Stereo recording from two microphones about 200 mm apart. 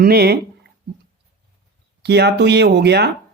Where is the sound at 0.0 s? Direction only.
50° right (ahead or behind).